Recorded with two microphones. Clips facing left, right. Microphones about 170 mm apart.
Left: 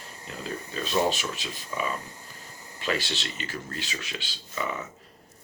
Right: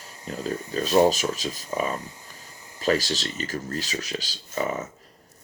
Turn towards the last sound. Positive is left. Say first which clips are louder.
# right 5 dB
turn(degrees=-40)  # may be behind; listen again after turning